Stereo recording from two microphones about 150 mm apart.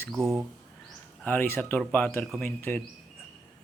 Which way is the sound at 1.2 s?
10° left (ahead or behind).